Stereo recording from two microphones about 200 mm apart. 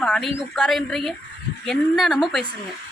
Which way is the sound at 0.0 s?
5° left (ahead or behind).